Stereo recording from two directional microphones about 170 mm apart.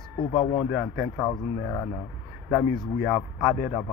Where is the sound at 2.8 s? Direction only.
25° left (ahead or behind).